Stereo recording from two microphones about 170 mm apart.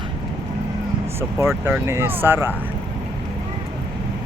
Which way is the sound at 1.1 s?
15° right (ahead or behind).